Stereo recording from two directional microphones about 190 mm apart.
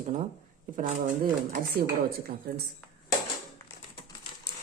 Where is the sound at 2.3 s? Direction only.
55° right (ahead or behind).